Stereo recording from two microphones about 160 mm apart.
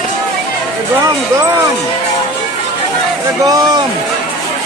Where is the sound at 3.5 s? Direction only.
25° right (ahead or behind).